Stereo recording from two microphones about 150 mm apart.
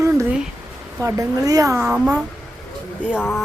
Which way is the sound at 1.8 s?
10° right (ahead or behind).